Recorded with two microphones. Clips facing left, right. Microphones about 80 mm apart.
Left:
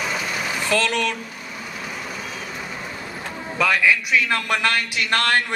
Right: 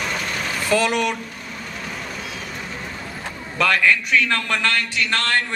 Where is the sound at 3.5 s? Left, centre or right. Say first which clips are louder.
Right 1 dB; centre.